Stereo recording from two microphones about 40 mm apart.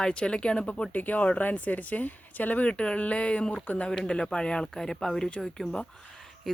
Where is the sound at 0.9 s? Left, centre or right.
Left.